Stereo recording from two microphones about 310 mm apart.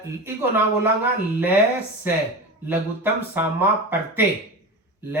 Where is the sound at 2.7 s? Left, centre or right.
Centre.